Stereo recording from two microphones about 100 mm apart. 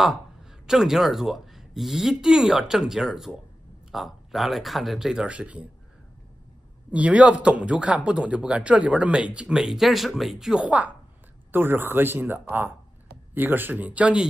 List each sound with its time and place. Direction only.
0.0 s a man's voice: 5° right (ahead or behind)
6.9 s speech: 10° right (ahead or behind)